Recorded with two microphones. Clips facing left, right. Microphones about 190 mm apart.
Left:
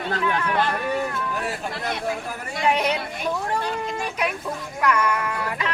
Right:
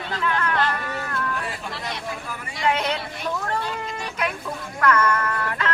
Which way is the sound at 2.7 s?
15° left (ahead or behind).